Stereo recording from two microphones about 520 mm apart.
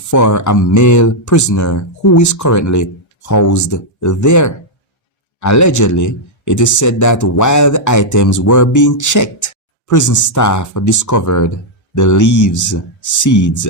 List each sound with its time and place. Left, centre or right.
0.1 s speech: left